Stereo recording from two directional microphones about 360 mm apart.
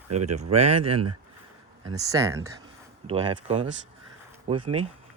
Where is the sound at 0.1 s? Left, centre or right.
Centre.